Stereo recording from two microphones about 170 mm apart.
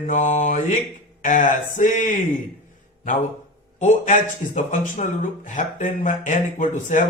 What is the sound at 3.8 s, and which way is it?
Speech, 45° left (ahead or behind).